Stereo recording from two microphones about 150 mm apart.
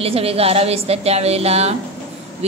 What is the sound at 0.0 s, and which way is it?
A woman's voice, 40° right (ahead or behind).